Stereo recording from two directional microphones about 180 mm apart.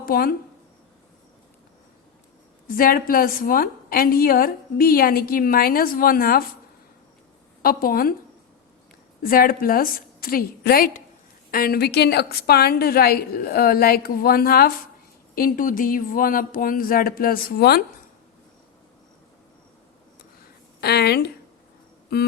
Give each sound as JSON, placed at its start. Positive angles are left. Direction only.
{"t": 0.0, "sound": "speech", "side_deg": 55}
{"t": 2.6, "sound": "a woman's voice", "side_deg": 50}
{"t": 7.6, "sound": "a woman's voice", "side_deg": 55}
{"t": 9.2, "sound": "a woman's voice", "side_deg": 55}
{"t": 20.8, "sound": "a woman's voice", "side_deg": 65}